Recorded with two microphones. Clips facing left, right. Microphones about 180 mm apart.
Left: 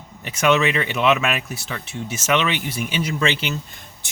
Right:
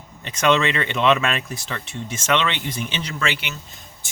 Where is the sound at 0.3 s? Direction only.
5° left (ahead or behind).